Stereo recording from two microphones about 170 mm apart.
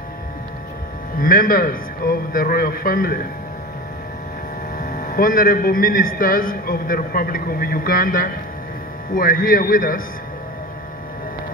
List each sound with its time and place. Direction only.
1.1 s a man's voice: 55° left (ahead or behind)
4.7 s a man's voice: 55° left (ahead or behind)